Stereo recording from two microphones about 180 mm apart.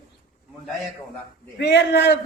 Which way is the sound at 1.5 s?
70° left (ahead or behind).